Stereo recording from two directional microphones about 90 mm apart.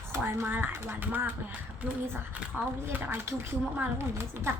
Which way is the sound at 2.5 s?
20° right (ahead or behind).